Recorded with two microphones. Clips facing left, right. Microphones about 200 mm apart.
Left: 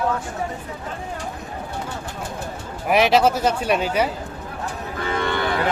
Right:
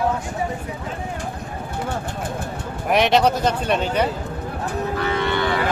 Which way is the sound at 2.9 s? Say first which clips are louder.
Even; 5° left (ahead or behind).